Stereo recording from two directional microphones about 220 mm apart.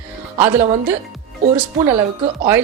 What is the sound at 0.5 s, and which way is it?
Speech, 30° right (ahead or behind).